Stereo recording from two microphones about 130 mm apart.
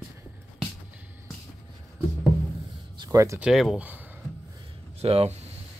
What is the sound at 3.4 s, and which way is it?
Speech, centre (ahead or behind).